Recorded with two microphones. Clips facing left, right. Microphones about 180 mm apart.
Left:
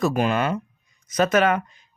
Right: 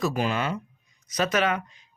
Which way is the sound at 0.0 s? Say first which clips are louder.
Left 5 dB; 55° left (ahead or behind).